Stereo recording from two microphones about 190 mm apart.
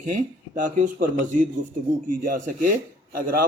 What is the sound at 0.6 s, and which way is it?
Speech, 45° right (ahead or behind).